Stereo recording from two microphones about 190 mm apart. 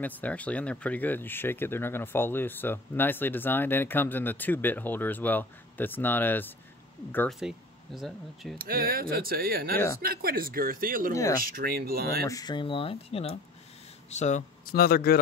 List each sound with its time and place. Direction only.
0.0 s speech: 10° left (ahead or behind)
7.3 s speech: centre (ahead or behind)
8.5 s speech: 50° right (ahead or behind)
11.1 s speech: 15° left (ahead or behind)
11.4 s speech: 50° right (ahead or behind)
12.3 s speech: 20° left (ahead or behind); by 15.1 s 55° left (ahead or behind)